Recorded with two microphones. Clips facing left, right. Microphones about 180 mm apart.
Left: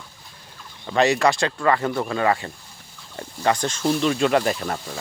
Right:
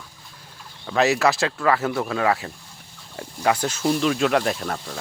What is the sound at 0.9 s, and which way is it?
Speech, centre (ahead or behind).